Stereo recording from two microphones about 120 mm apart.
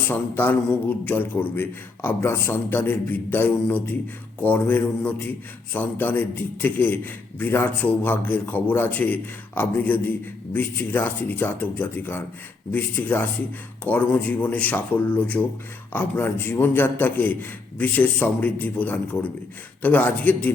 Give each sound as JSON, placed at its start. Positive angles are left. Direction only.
{"t": 0.1, "sound": "a man's voice", "side_deg": 15}